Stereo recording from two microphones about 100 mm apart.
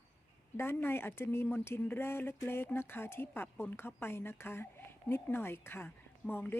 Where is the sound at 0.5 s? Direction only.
20° left (ahead or behind).